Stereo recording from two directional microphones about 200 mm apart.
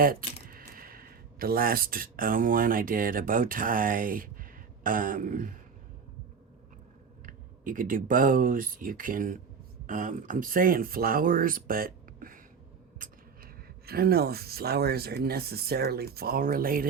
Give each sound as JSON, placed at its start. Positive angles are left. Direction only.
{"t": 0.0, "sound": "typing", "side_deg": -45}
{"t": 0.7, "sound": "speech", "side_deg": -45}
{"t": 7.3, "sound": "speech", "side_deg": -45}